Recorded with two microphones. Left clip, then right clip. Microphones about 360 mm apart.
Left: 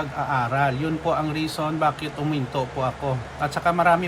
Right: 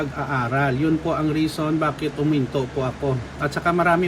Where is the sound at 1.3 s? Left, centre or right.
Centre.